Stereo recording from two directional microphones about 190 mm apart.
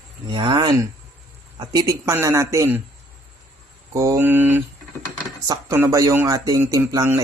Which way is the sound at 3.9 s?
15° right (ahead or behind).